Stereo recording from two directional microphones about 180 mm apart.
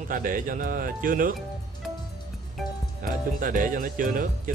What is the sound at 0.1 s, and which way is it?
Speech, 50° right (ahead or behind).